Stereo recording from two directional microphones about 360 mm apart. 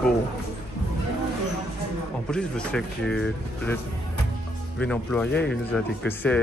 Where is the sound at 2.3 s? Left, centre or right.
Centre.